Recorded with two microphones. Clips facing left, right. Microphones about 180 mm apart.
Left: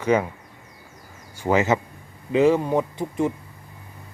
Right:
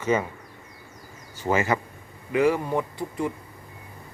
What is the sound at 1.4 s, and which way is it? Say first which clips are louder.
Speech: left 3 dB; 15° left (ahead or behind).